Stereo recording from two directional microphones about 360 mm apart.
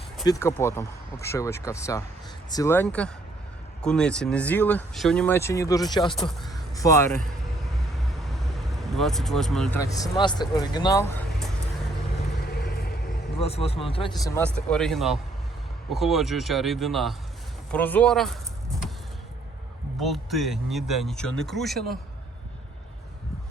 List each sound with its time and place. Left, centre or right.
0.3 s speech: centre
6.4 s a sound: centre
7.9 s speech: centre
12.5 s vehicle: left
13.4 s speech: centre
20.0 s speech: centre